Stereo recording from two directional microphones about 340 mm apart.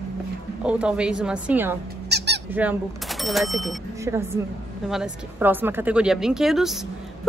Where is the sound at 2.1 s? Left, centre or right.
Right.